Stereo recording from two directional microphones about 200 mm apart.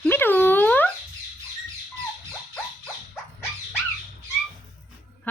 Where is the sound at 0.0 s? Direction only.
10° left (ahead or behind).